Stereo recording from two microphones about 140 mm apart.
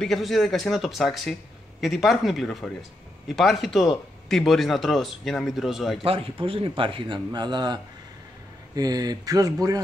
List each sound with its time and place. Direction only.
0.0 s speech: centre (ahead or behind)
6.0 s a man's voice: 40° right (ahead or behind)